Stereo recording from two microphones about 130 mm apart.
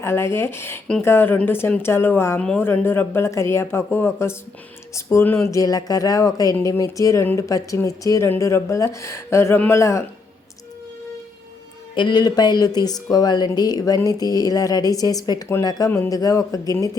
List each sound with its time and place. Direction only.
0.0 s speech: 20° left (ahead or behind)
11.9 s speech: 35° left (ahead or behind)